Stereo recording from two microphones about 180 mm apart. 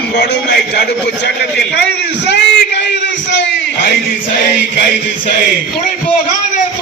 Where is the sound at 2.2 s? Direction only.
75° left (ahead or behind).